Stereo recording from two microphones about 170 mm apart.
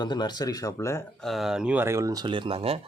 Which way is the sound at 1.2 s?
Centre (ahead or behind).